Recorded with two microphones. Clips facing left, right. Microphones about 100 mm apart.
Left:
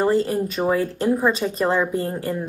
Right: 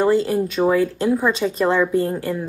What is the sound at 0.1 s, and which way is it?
Speech, 40° left (ahead or behind).